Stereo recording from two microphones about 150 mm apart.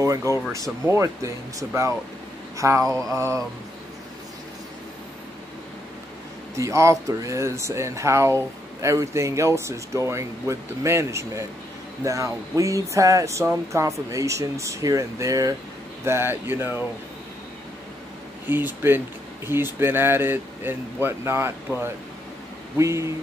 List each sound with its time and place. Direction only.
0.0 s speech: 20° right (ahead or behind)
6.5 s speech: 20° right (ahead or behind)
18.5 s speech: 15° right (ahead or behind)